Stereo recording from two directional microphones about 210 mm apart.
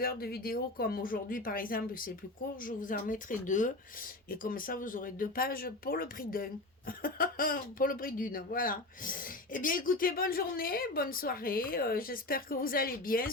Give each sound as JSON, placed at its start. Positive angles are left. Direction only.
{"t": 0.0, "sound": "speech", "side_deg": 45}